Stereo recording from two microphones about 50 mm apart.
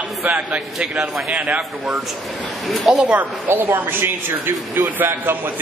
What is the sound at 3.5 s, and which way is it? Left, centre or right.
Speech, right.